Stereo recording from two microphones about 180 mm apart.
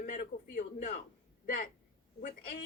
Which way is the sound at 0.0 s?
45° left (ahead or behind).